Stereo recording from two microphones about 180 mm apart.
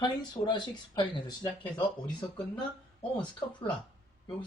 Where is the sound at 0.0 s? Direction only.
25° left (ahead or behind).